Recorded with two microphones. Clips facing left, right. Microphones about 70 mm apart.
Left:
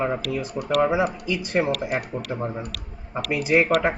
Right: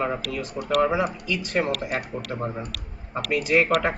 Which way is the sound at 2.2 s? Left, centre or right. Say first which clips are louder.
Left 1 dB; centre.